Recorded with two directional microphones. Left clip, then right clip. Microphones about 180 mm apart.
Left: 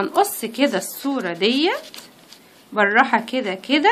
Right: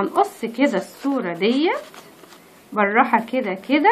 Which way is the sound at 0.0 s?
35° left (ahead or behind).